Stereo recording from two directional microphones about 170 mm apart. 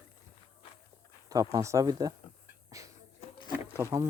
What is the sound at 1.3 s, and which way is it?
Speech, 20° right (ahead or behind).